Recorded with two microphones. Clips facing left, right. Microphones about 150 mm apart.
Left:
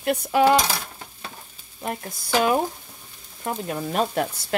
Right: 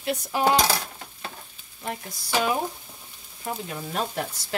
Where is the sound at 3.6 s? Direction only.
55° left (ahead or behind).